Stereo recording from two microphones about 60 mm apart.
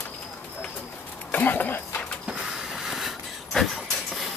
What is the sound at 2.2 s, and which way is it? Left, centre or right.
Vehicle, centre.